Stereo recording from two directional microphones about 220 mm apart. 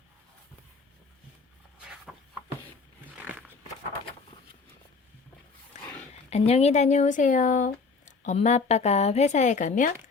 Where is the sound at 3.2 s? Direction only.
10° right (ahead or behind).